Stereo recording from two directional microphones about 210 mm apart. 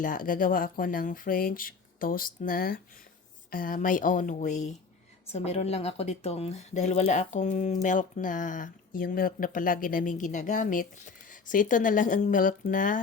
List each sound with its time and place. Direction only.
0.0 s speech: 40° left (ahead or behind)